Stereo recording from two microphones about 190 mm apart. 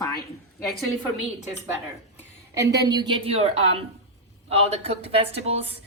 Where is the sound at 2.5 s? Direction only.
20° right (ahead or behind).